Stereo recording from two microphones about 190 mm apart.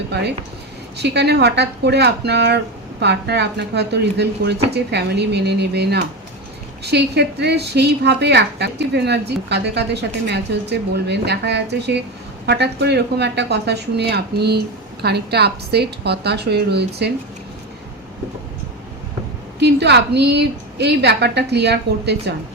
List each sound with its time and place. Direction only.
0.9 s a woman's voice: 60° right (ahead or behind)
19.5 s a woman's voice: 65° right (ahead or behind)